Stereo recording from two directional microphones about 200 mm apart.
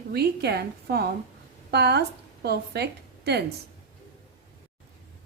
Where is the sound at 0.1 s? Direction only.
55° right (ahead or behind).